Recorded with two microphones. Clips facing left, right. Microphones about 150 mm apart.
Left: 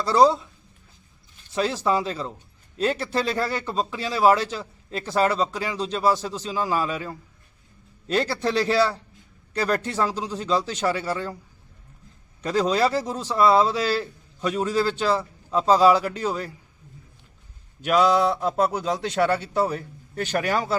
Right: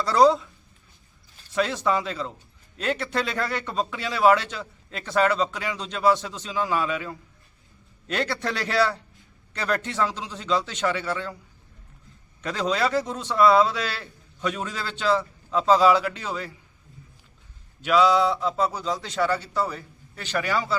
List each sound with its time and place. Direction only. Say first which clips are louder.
0.0 s speech: even; 30° left (ahead or behind)
1.5 s a man's voice: left 1 dB; 30° left (ahead or behind)
12.4 s a man's voice: left 4 dB; 35° left (ahead or behind)
17.8 s speech: even; 50° left (ahead or behind)